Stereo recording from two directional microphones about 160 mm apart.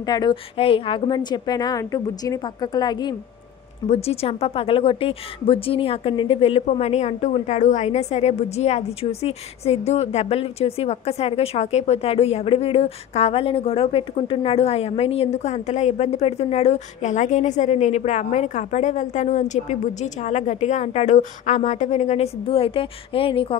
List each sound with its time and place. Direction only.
0.0 s a woman's voice: 25° left (ahead or behind)
0.6 s a woman's voice: 35° left (ahead or behind)
3.9 s speech: 40° left (ahead or behind)